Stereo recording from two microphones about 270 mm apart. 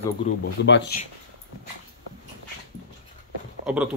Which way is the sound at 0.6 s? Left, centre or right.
Left.